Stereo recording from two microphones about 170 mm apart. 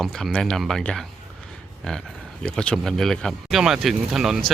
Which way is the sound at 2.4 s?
5° left (ahead or behind).